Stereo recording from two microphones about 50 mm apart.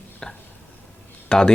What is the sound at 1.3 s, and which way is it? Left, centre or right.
Speech, centre.